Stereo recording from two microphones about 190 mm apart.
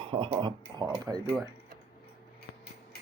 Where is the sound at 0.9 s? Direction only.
15° right (ahead or behind).